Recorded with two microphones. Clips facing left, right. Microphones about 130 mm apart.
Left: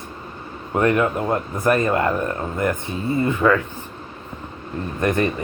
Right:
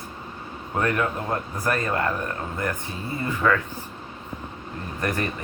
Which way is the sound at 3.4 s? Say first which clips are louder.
Left 4 dB; 25° left (ahead or behind).